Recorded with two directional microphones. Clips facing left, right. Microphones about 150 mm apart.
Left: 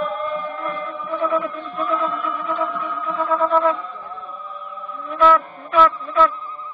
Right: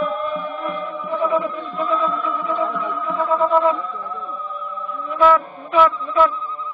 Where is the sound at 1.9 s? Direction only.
25° right (ahead or behind).